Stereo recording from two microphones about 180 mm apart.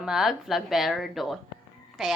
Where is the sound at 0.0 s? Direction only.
Centre (ahead or behind).